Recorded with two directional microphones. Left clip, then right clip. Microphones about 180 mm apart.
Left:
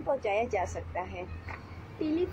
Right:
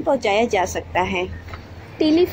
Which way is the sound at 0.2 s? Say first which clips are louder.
Right 11 dB; 40° right (ahead or behind).